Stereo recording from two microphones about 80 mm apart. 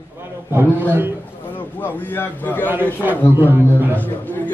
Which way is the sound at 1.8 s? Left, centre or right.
Left.